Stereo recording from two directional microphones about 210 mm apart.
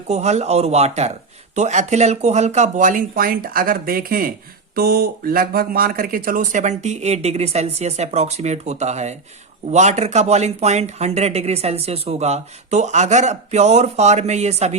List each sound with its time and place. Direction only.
0.1 s speech: 30° right (ahead or behind)